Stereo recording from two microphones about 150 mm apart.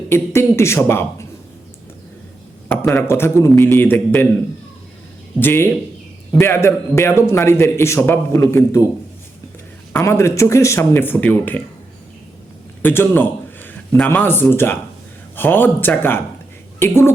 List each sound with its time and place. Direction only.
0.1 s a man's voice: 15° left (ahead or behind)
2.6 s a man's voice: 15° left (ahead or behind)
5.4 s a man's voice: 15° left (ahead or behind)
9.9 s a man's voice: 20° left (ahead or behind)
12.8 s a man's voice: 15° left (ahead or behind)